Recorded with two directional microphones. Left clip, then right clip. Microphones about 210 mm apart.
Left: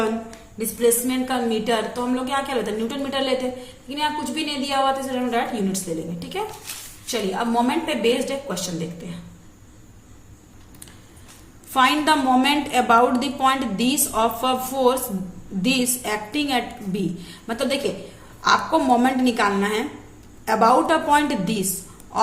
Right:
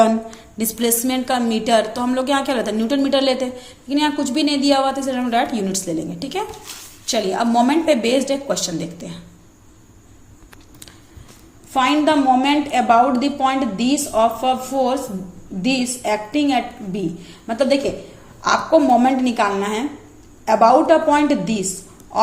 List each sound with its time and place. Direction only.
0.6 s a woman's voice: 40° right (ahead or behind)
11.7 s a woman's voice: 10° right (ahead or behind)